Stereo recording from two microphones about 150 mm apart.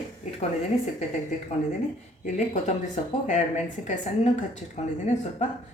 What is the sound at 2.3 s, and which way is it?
Speech, 50° left (ahead or behind).